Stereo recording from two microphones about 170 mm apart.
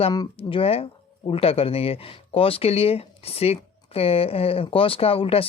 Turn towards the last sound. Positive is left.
turn(degrees=35)  # may be behind; listen again after turning